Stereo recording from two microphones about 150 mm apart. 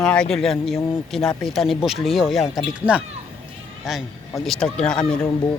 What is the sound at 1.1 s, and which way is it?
Speech, centre (ahead or behind).